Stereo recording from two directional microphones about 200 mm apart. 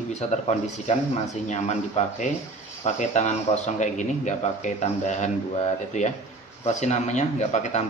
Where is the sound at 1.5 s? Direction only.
35° left (ahead or behind).